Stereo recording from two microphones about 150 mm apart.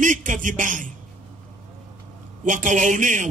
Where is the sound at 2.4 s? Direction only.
60° right (ahead or behind).